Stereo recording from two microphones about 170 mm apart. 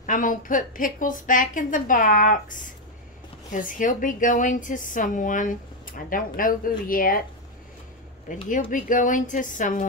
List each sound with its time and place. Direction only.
0.0 s a woman's voice: 50° left (ahead or behind)
8.5 s a woman's voice: 55° left (ahead or behind)